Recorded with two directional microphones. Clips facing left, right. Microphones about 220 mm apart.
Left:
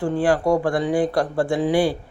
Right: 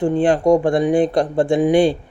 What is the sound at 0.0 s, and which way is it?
Speech, 20° right (ahead or behind).